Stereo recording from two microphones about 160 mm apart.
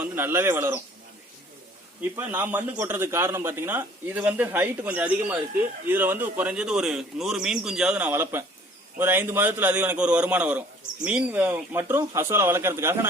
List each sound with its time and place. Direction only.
0.0 s a man's voice: 15° right (ahead or behind)
2.1 s a man's voice: 10° right (ahead or behind)